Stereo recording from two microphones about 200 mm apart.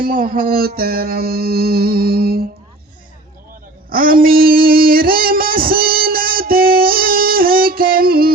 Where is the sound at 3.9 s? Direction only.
45° right (ahead or behind).